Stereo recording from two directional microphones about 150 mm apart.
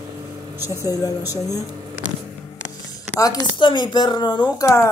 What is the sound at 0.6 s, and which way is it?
Speech, 15° right (ahead or behind).